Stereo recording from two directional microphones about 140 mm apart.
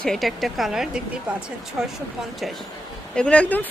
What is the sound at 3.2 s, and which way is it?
Speech, 10° left (ahead or behind).